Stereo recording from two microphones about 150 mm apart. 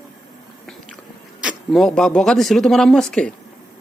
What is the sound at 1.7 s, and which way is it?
Speech, 5° left (ahead or behind).